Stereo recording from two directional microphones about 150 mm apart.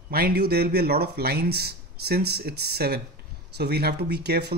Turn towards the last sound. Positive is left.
turn(degrees=-90)